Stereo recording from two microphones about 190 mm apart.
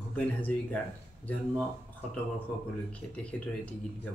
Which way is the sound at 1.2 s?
10° left (ahead or behind).